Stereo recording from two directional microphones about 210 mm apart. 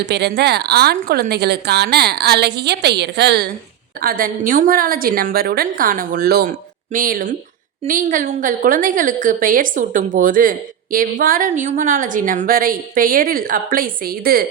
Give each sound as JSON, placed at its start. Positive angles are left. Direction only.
{"t": 0.0, "sound": "a woman's voice", "side_deg": -55}
{"t": 4.0, "sound": "a woman's voice", "side_deg": -40}